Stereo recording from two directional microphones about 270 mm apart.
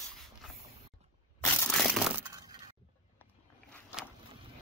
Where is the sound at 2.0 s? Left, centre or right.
Centre.